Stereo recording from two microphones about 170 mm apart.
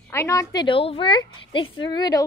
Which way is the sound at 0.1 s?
15° left (ahead or behind).